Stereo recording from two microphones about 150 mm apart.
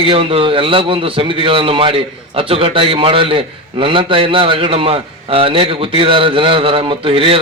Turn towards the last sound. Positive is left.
turn(degrees=-35)  # may be behind; listen again after turning